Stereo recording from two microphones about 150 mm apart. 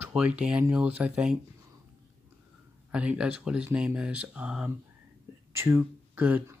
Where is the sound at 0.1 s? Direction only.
5° right (ahead or behind).